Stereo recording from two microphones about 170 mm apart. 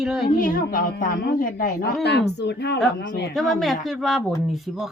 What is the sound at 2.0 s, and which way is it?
Speech, 80° left.